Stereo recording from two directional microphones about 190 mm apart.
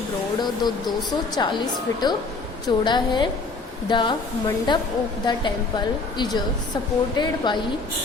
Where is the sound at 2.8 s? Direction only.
25° left (ahead or behind).